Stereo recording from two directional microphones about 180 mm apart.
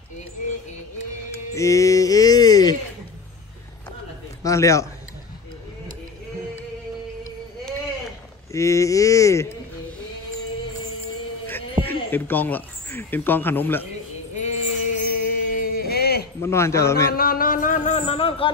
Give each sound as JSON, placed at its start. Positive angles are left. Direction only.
{"t": 1.5, "sound": "music", "side_deg": 15}
{"t": 4.4, "sound": "a man's voice", "side_deg": 15}
{"t": 8.5, "sound": "speech", "side_deg": 15}
{"t": 11.8, "sound": "speech", "side_deg": 10}
{"t": 14.3, "sound": "music", "side_deg": 40}
{"t": 16.3, "sound": "speech", "side_deg": 15}
{"t": 17.1, "sound": "speech", "side_deg": 55}